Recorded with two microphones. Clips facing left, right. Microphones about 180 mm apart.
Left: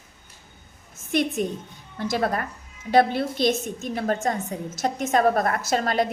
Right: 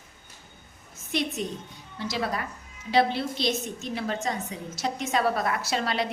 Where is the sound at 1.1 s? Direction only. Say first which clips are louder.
Left 5 dB; 50° left (ahead or behind).